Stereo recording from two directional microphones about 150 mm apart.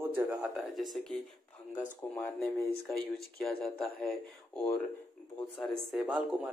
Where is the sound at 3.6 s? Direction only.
Centre (ahead or behind).